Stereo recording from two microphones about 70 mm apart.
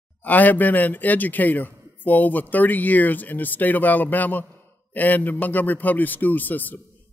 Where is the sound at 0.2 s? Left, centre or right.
Left.